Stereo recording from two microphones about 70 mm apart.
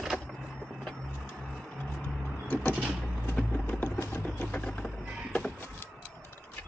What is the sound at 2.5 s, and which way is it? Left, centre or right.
Vehicle, left.